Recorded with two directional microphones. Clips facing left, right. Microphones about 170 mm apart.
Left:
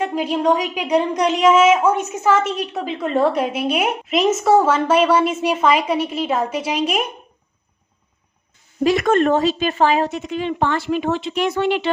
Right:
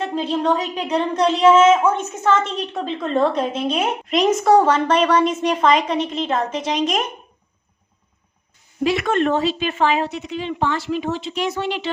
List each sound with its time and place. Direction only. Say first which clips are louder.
0.0 s a woman's voice: left 2 dB; 10° left (ahead or behind)
8.8 s a woman's voice: left 3 dB; 45° left (ahead or behind)